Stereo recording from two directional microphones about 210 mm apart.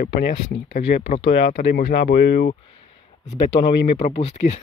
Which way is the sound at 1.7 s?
50° left (ahead or behind).